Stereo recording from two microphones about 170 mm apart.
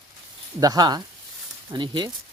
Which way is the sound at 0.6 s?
25° right (ahead or behind).